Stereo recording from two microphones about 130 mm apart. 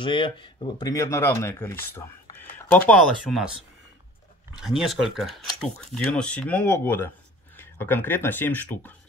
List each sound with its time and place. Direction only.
0.0 s speech: 40° left (ahead or behind); by 2.0 s 20° left (ahead or behind)
2.3 s a sound: 15° left (ahead or behind)
3.3 s speech: 5° right (ahead or behind)
4.6 s speech: centre (ahead or behind)